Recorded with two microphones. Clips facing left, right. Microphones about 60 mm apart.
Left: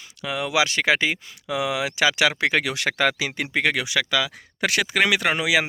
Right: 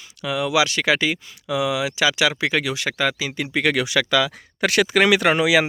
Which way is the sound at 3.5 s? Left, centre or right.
Left.